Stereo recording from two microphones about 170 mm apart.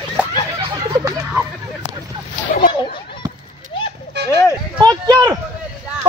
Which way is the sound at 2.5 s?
55° left (ahead or behind).